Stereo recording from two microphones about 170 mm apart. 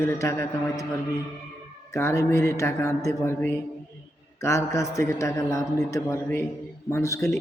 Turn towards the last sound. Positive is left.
turn(degrees=15)  # may be behind; listen again after turning